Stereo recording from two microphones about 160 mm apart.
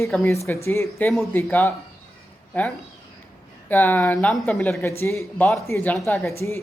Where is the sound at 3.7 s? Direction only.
10° left (ahead or behind).